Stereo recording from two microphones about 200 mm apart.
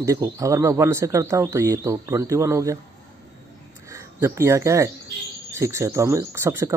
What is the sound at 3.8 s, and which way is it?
Speech, 15° right (ahead or behind).